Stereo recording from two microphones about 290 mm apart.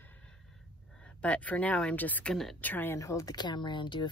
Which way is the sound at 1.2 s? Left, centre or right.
Centre.